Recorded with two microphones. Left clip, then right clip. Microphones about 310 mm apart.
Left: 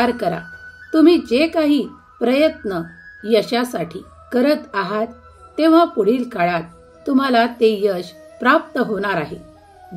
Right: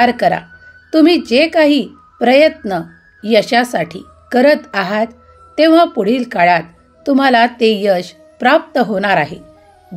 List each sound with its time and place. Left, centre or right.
0.0 s speech: centre